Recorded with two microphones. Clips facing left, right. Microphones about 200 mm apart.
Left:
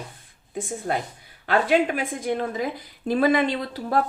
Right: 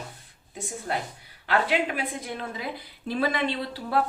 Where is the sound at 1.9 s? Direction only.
45° left (ahead or behind).